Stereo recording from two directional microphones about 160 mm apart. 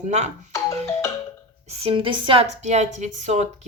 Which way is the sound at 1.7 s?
40° right (ahead or behind).